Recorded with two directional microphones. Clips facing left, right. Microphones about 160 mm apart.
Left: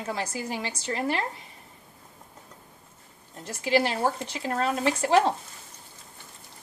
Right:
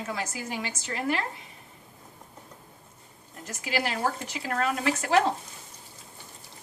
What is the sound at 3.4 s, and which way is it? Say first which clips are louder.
A woman's voice: left 6 dB; 30° left (ahead or behind).